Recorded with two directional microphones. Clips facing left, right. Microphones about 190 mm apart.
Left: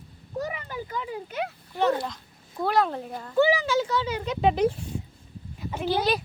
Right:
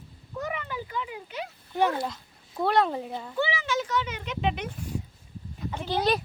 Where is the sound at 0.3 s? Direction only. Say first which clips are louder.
Left 1 dB; 35° left (ahead or behind).